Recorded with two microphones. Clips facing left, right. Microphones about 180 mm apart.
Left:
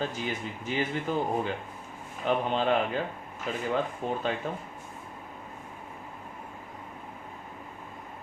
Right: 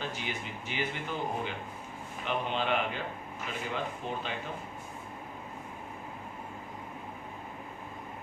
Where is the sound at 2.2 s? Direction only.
40° left (ahead or behind).